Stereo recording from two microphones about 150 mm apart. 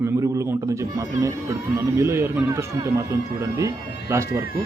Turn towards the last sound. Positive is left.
turn(degrees=-20)  # may be behind; listen again after turning